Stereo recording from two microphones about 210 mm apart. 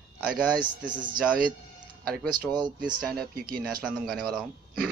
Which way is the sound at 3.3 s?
45° right (ahead or behind).